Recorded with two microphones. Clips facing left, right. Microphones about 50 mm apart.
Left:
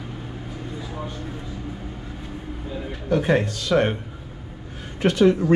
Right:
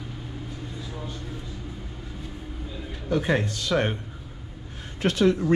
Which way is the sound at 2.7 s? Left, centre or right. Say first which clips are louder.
Left 6 dB; left.